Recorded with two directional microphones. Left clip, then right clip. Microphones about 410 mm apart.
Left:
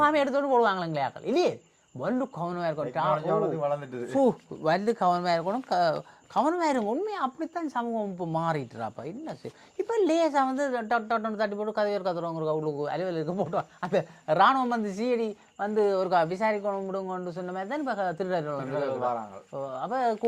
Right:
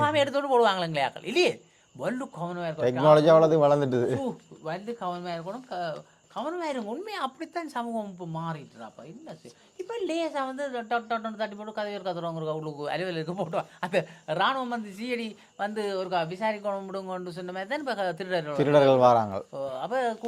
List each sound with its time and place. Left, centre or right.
0.0 s a man's voice: left
2.6 s speech: left
3.1 s speech: right
4.2 s speech: left
7.1 s speech: left
8.3 s speech: left
9.7 s a man's voice: left
16.6 s a man's voice: left
18.7 s a man's voice: right
19.5 s speech: left